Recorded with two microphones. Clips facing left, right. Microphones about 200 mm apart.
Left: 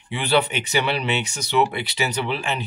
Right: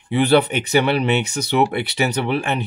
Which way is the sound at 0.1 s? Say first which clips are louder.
Right 6 dB; 55° right (ahead or behind).